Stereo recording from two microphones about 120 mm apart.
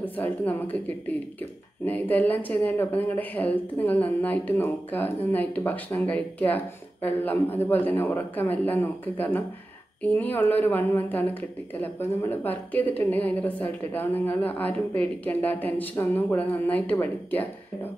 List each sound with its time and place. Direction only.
0.0 s a woman's voice: 15° left (ahead or behind)